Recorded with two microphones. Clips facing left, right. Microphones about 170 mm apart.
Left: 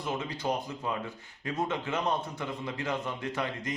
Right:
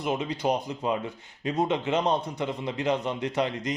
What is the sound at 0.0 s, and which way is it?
Speech, 20° right (ahead or behind).